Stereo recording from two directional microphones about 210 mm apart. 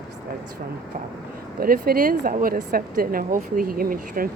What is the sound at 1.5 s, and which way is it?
Speech, 45° right (ahead or behind).